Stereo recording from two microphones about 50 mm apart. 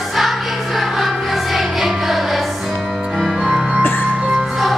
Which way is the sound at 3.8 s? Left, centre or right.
Left.